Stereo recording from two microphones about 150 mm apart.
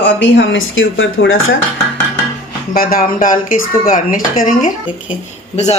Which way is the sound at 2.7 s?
75° left (ahead or behind).